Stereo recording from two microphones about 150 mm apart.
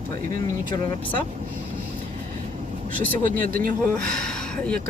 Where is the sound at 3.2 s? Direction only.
65° right (ahead or behind).